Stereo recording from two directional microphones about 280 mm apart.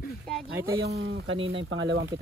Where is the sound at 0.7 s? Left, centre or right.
Right.